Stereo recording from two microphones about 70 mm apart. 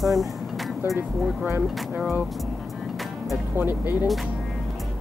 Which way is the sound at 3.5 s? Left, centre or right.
Right.